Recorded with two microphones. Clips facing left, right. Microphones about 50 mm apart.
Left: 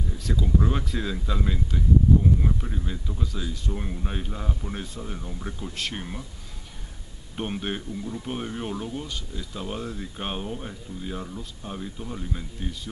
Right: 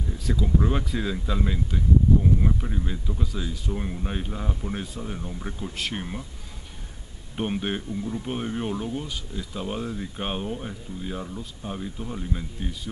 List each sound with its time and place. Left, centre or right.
0.2 s speech: centre
7.3 s speech: centre